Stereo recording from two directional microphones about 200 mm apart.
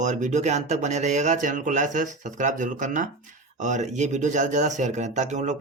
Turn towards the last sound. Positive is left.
turn(degrees=-35)  # may be behind; listen again after turning